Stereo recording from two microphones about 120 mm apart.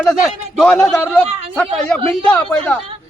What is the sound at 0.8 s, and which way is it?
A man's voice, 20° left (ahead or behind).